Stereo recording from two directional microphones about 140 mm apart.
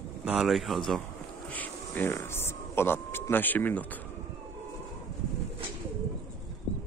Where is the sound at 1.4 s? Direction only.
10° left (ahead or behind).